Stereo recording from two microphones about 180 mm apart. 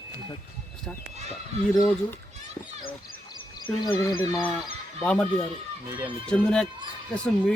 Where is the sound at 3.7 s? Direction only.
5° left (ahead or behind).